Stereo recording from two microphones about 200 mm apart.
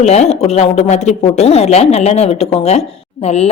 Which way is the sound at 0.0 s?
35° left (ahead or behind).